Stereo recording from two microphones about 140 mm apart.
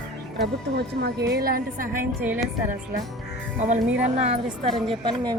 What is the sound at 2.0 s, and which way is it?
Speech, 15° right (ahead or behind).